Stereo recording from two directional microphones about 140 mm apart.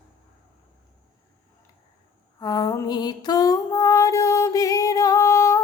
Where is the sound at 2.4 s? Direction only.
30° left (ahead or behind).